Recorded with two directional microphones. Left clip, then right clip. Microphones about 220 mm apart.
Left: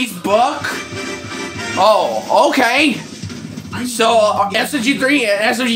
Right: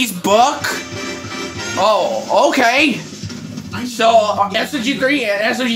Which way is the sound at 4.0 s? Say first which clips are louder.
Even; 20° left (ahead or behind).